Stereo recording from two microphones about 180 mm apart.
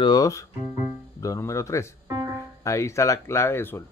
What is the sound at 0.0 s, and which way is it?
Speech, 20° left (ahead or behind).